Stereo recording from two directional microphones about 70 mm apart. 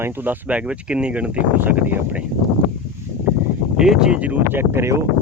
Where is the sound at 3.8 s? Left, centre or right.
Centre.